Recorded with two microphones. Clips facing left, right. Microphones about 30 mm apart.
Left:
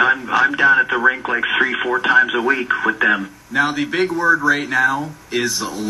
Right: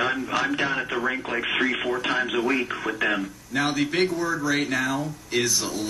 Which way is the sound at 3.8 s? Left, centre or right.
Centre.